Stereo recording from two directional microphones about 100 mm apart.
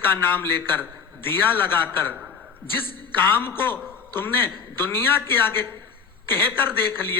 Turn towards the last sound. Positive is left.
turn(degrees=20)  # may be behind; listen again after turning